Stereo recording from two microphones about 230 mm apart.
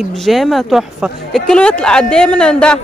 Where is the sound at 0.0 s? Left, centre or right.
Centre.